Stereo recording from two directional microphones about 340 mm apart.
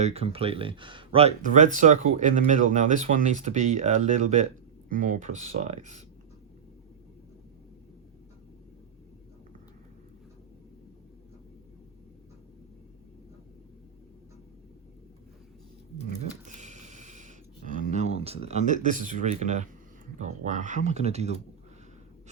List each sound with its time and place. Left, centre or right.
0.0 s speech: centre
16.5 s a sound: right
20.1 s speech: right